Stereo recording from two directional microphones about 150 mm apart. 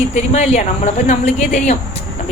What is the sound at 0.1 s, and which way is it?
Speech, 50° left (ahead or behind).